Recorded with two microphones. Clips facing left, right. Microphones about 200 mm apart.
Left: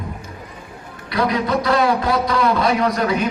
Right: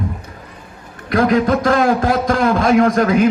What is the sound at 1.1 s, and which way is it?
A man's voice, 50° right (ahead or behind).